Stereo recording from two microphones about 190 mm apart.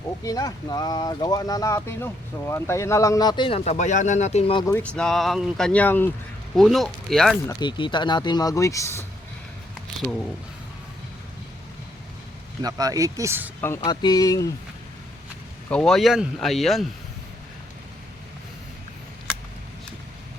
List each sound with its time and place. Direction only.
0.3 s speech: 20° left (ahead or behind)
3.6 s speech: 40° left (ahead or behind)
4.6 s speech: 10° left (ahead or behind)
7.4 s speech: 25° left (ahead or behind)
12.6 s speech: 20° right (ahead or behind)
13.6 s speech: 15° left (ahead or behind)
15.7 s speech: 5° left (ahead or behind)